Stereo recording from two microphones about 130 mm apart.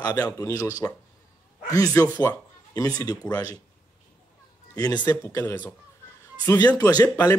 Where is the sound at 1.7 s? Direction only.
25° left (ahead or behind).